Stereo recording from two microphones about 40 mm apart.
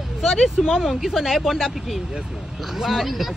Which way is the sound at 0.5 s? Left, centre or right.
Centre.